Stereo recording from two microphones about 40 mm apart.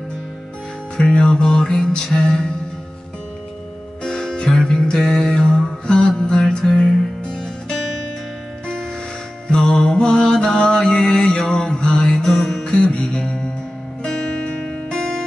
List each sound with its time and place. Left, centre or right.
0.9 s music: left
2.1 s mantra: centre
4.0 s music: centre
5.0 s mantra: centre
6.8 s music: centre
9.5 s mantra: left
12.2 s music: centre
12.6 s music: left